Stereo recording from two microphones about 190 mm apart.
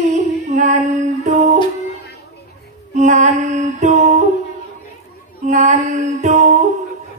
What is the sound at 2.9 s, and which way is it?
Mantra, 40° right (ahead or behind).